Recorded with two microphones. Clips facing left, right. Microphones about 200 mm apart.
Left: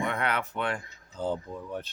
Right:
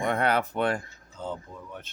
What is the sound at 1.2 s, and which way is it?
Speech, 35° left (ahead or behind).